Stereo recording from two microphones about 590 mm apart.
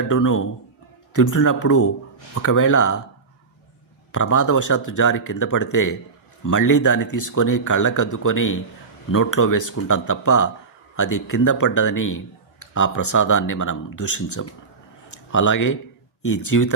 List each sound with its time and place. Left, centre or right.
0.1 s a man's voice: left
4.1 s a man's voice: left